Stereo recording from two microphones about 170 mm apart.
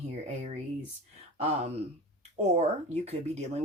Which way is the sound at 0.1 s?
40° right (ahead or behind).